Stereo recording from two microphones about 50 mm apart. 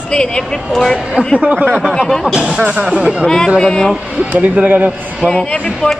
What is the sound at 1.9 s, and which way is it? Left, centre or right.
Speech, centre.